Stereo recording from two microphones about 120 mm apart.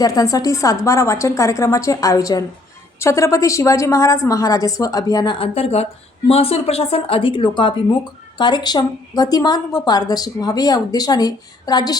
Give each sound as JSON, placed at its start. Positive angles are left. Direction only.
{"t": 0.0, "sound": "a woman's voice", "side_deg": 30}